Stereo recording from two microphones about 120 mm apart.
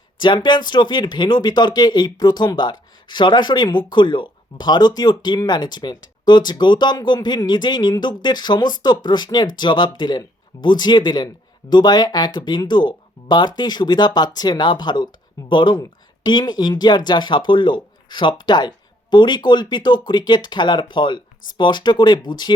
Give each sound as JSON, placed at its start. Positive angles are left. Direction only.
{"t": 0.2, "sound": "speech", "side_deg": 40}